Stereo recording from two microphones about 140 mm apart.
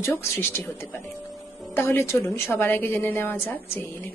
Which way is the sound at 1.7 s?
15° left (ahead or behind).